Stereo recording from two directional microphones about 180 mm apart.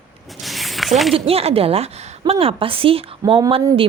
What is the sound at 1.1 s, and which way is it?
A woman's voice, 30° right (ahead or behind).